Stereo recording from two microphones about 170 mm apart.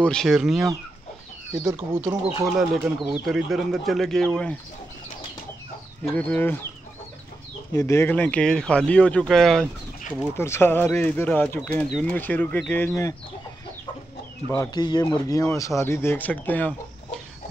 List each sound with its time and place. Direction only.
0.0 s speech: 5° left (ahead or behind)
1.8 s speech: 10° right (ahead or behind)
2.4 s speech: centre (ahead or behind)
6.1 s speech: 10° left (ahead or behind)
7.7 s speech: 15° left (ahead or behind)
10.3 s speech: 15° left (ahead or behind)
14.5 s speech: 20° left (ahead or behind)